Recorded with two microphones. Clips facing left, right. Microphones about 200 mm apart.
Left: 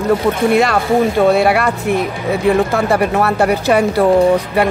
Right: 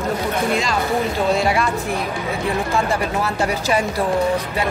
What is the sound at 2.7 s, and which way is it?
Speech, 65° left (ahead or behind).